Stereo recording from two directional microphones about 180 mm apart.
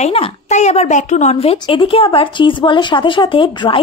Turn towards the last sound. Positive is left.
turn(degrees=30)  # may be behind; listen again after turning